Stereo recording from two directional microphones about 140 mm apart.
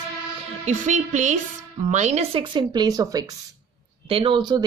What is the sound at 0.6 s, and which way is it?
Music, 60° right (ahead or behind).